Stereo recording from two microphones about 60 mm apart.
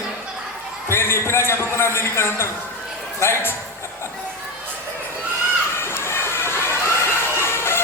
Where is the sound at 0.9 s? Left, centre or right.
Left.